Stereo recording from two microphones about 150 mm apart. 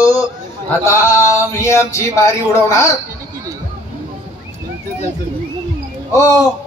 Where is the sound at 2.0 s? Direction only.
20° left (ahead or behind).